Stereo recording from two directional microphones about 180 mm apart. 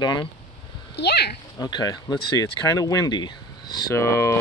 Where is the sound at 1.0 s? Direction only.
65° left (ahead or behind).